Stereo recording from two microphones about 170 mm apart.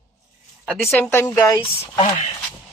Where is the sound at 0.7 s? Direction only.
10° left (ahead or behind).